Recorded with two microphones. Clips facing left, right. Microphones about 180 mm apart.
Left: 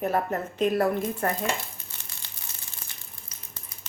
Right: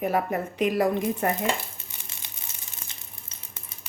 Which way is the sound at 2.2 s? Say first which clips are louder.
Right 1 dB; 20° right (ahead or behind).